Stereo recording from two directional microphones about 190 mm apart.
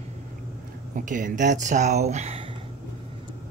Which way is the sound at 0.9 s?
45° right (ahead or behind).